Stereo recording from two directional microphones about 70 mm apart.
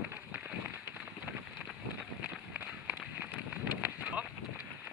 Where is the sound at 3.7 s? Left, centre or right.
Right.